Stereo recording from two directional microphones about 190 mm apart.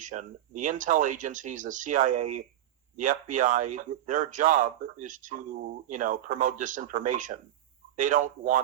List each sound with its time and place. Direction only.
0.0 s speech: 40° right (ahead or behind)